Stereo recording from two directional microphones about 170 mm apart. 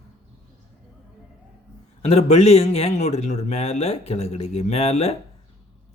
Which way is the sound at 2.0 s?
40° left (ahead or behind).